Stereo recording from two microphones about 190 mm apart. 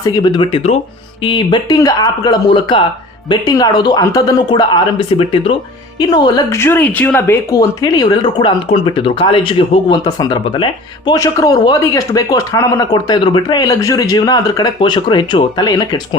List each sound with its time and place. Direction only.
0.0 s speech: 20° left (ahead or behind)